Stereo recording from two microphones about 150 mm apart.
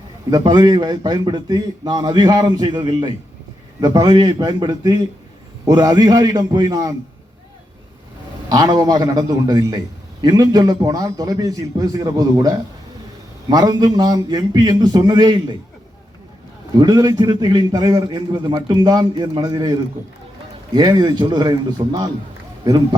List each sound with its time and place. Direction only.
0.3 s a man's voice: 25° right (ahead or behind)
8.4 s a man's voice: 25° right (ahead or behind)
16.7 s a man's voice: 25° right (ahead or behind)